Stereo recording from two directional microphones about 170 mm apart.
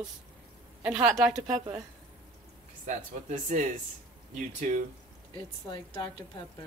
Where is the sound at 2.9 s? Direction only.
50° right (ahead or behind).